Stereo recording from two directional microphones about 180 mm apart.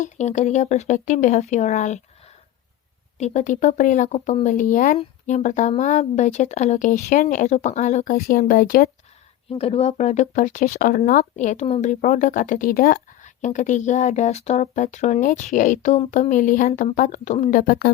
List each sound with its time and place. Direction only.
0.0 s speech: 40° left (ahead or behind)
3.2 s speech: 40° left (ahead or behind)
9.5 s speech: 35° left (ahead or behind); by 17.9 s 55° left (ahead or behind)